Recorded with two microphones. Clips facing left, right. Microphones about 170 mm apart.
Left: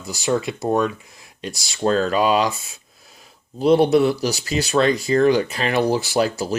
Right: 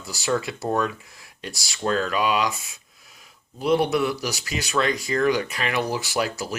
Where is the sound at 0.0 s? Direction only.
20° left (ahead or behind).